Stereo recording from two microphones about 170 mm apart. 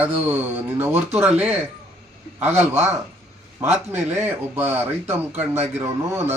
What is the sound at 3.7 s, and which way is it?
Speech, 10° right (ahead or behind).